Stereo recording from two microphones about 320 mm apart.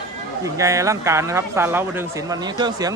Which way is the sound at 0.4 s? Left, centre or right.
Centre.